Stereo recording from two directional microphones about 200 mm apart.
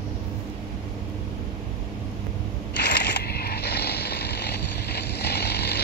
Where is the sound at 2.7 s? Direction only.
55° left (ahead or behind).